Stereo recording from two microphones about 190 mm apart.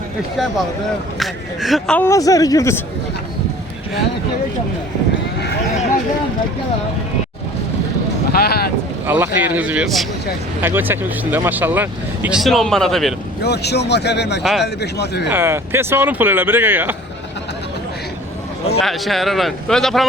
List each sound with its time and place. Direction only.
1.2 s speech: centre (ahead or behind); by 2.8 s 15° left (ahead or behind)
8.3 s speech: 55° left (ahead or behind)
9.0 s speech: 10° right (ahead or behind)
13.4 s speech: 60° left (ahead or behind)
15.3 s speech: 10° right (ahead or behind)
18.8 s speech: centre (ahead or behind)